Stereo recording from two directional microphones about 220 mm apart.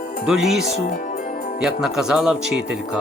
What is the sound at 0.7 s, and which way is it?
Speech, 30° left (ahead or behind).